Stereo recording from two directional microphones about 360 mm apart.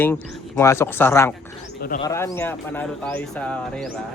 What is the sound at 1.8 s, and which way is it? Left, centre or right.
Speech, left.